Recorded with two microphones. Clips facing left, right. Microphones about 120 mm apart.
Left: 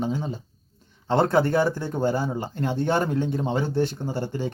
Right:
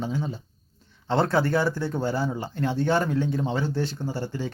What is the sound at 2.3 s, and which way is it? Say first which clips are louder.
Speech: left 1 dB; 40° left (ahead or behind).